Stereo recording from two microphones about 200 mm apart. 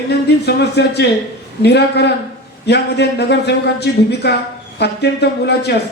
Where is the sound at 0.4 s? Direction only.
55° left (ahead or behind).